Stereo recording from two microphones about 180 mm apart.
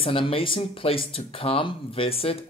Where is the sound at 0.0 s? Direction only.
30° left (ahead or behind).